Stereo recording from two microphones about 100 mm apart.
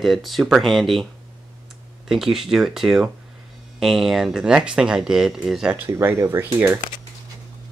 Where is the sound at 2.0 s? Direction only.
5° right (ahead or behind).